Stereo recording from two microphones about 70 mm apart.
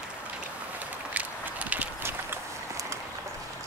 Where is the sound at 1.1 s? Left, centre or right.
Right.